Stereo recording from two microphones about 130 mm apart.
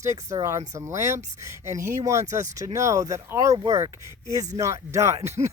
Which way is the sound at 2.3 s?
25° right (ahead or behind).